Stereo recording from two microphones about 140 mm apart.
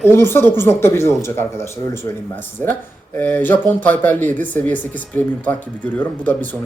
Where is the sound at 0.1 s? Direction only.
15° left (ahead or behind).